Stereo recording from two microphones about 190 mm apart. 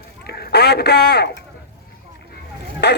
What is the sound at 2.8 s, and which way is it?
Speech, 60° left (ahead or behind).